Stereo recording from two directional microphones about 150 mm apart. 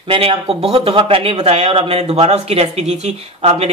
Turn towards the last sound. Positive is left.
turn(degrees=-45)  # may be behind; listen again after turning